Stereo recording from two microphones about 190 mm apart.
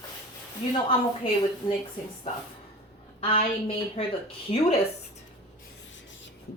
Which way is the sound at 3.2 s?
30° left (ahead or behind).